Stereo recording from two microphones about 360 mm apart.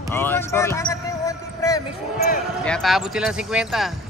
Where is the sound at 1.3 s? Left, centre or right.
Centre.